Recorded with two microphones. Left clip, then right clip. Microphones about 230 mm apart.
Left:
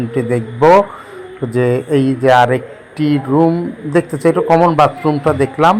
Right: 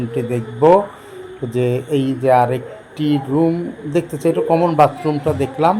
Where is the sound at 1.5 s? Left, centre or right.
Centre.